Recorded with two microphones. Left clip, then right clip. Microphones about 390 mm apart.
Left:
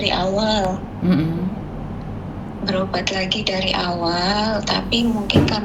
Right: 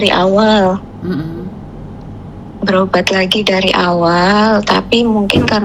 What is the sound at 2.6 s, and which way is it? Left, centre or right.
A woman's voice, right.